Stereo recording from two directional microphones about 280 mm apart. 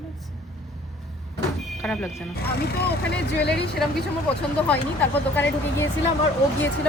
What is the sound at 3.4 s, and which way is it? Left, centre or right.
Speech, left.